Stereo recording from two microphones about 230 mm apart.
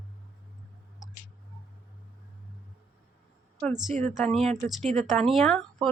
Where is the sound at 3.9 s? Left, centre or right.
Right.